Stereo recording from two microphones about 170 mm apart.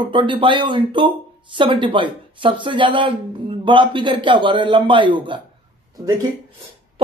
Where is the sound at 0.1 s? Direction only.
30° right (ahead or behind).